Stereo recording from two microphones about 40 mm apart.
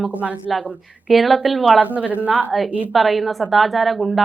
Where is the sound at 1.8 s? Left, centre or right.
Right.